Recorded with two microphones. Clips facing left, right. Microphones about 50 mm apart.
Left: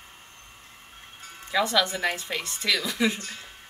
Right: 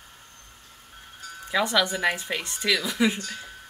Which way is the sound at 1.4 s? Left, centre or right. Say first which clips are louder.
Even; centre.